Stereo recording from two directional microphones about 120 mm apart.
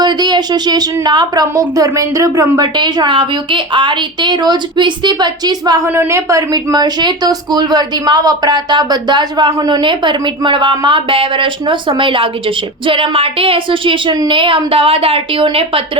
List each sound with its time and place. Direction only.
0.0 s speech: 35° right (ahead or behind)
2.7 s speech: 40° right (ahead or behind)
5.9 s a woman's voice: 20° right (ahead or behind); by 15.4 s 50° right (ahead or behind)